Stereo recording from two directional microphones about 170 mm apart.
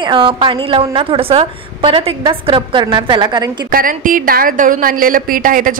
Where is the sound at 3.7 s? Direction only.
55° right (ahead or behind).